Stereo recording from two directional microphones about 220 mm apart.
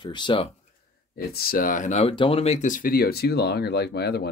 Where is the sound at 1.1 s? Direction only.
45° left (ahead or behind).